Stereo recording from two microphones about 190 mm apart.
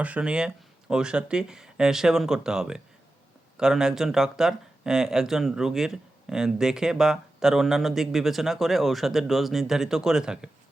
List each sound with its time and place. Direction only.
0.0 s speech: 5° right (ahead or behind)